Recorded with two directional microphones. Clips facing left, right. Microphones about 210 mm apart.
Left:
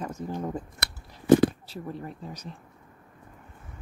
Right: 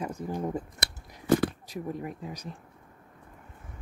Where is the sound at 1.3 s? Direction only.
20° left (ahead or behind).